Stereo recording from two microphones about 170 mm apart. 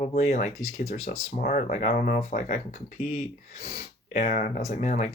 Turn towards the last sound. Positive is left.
turn(degrees=45)  # may be behind; listen again after turning